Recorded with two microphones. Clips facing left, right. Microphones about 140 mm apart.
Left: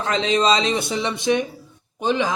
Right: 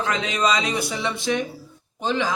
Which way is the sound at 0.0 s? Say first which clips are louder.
Left 4 dB; 30° left (ahead or behind).